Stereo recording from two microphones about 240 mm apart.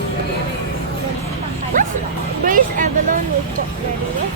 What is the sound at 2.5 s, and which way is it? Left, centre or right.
Music, right.